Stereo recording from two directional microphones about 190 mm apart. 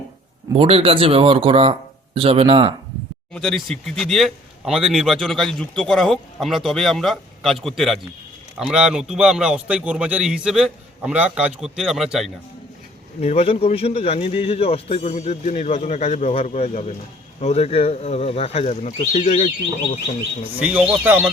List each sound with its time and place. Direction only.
0.5 s speech: 30° right (ahead or behind)
3.3 s speech: centre (ahead or behind)
13.2 s speech: 35° left (ahead or behind)
20.6 s speech: 5° right (ahead or behind)